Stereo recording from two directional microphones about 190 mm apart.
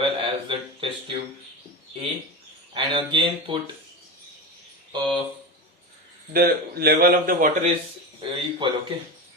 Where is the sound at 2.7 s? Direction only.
25° right (ahead or behind).